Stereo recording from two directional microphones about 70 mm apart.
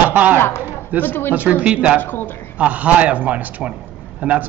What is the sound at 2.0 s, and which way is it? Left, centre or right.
Speech, left.